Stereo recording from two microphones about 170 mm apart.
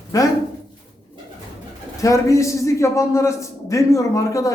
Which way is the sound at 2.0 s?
20° left (ahead or behind).